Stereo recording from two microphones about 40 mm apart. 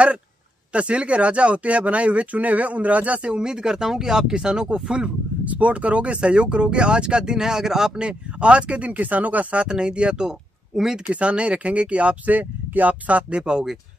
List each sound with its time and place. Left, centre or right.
0.7 s speech: right
3.4 s speech: centre
5.4 s speech: right
9.6 s speech: right
12.3 s speech: right
13.4 s speech: centre